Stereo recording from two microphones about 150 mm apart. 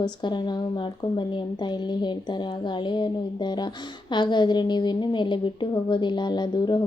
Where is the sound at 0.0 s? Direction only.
30° left (ahead or behind).